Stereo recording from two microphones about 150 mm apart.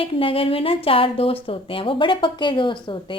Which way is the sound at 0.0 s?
35° left (ahead or behind).